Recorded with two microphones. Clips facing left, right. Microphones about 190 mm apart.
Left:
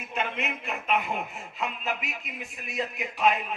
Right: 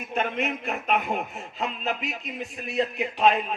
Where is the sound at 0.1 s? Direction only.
45° right (ahead or behind).